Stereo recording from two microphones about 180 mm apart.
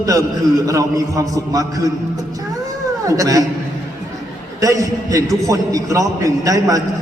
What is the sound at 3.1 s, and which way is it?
Speech, 20° right (ahead or behind).